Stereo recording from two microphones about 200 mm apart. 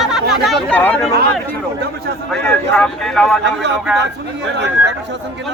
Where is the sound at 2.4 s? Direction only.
5° left (ahead or behind).